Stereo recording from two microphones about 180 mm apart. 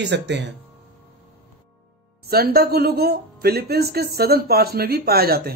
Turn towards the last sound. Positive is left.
turn(degrees=-60)  # may be behind; listen again after turning